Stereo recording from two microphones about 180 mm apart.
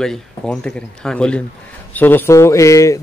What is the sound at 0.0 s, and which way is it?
Speech, 5° left (ahead or behind).